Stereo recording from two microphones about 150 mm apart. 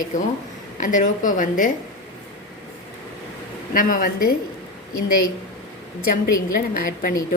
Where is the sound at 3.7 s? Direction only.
65° left (ahead or behind).